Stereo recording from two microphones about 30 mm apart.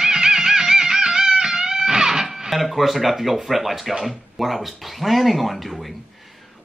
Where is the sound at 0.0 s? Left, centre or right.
Right.